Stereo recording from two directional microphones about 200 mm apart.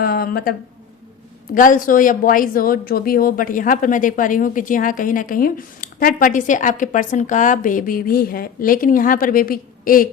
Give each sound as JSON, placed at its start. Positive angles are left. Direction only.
{"t": 0.0, "sound": "speech", "side_deg": 45}
{"t": 1.5, "sound": "a woman's voice", "side_deg": 40}